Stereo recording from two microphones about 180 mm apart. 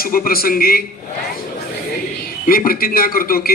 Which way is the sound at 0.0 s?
55° left (ahead or behind).